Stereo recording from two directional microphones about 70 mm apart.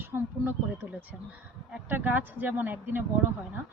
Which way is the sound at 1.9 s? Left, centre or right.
Right.